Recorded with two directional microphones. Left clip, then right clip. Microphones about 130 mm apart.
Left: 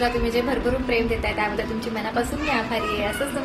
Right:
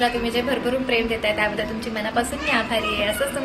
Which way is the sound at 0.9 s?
15° left (ahead or behind).